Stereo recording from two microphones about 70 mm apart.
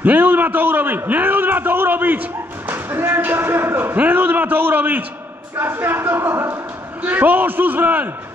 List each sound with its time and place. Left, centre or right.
0.0 s a man's voice: right
4.0 s a sound: right
5.6 s speech: right